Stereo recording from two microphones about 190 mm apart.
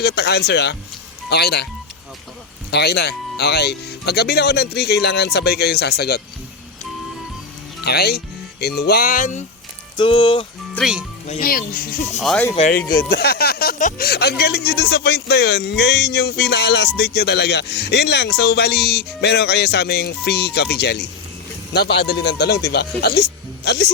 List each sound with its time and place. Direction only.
0.0 s speech: 60° left (ahead or behind)
2.6 s speech: 60° left (ahead or behind)
7.9 s speech: 55° left (ahead or behind)
10.0 s speech: 25° left (ahead or behind)
10.8 s speech: centre (ahead or behind)
11.3 s speech: 50° left (ahead or behind)
12.2 s speech: centre (ahead or behind)
13.1 s speech: 55° left (ahead or behind)